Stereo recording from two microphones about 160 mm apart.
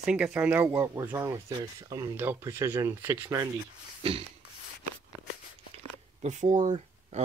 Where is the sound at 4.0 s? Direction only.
35° right (ahead or behind).